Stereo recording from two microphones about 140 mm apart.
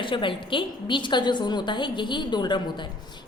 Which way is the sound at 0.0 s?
35° left (ahead or behind).